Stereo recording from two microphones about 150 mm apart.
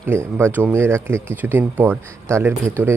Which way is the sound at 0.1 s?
15° right (ahead or behind).